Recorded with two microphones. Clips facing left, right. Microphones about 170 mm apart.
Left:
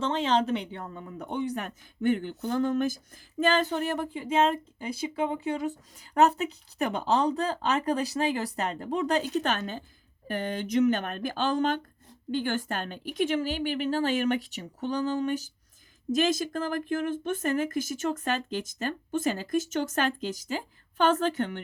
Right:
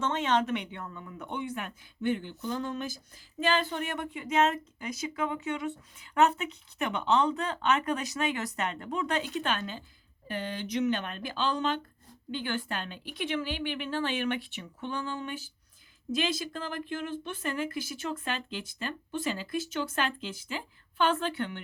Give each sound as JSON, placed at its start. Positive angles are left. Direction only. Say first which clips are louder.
{"t": 0.0, "sound": "a woman's voice", "louder": "left 2 dB", "side_deg": 30}